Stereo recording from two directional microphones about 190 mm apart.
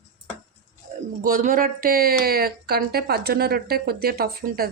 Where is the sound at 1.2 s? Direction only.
45° right (ahead or behind).